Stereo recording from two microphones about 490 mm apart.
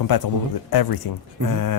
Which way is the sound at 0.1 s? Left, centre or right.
Left.